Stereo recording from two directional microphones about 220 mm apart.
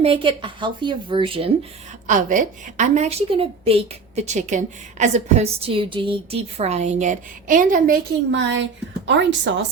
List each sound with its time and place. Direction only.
0.0 s a woman's voice: 25° right (ahead or behind)
2.0 s a woman's voice: 35° right (ahead or behind); by 9.6 s 55° right (ahead or behind)